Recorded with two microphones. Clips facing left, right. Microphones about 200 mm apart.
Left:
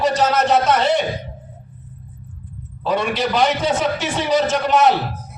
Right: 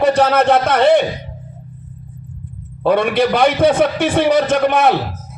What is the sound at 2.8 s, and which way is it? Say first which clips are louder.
A man's voice: right 6 dB; 55° right (ahead or behind).